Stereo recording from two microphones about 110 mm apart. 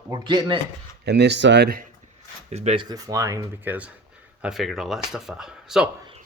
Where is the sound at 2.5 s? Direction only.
80° right.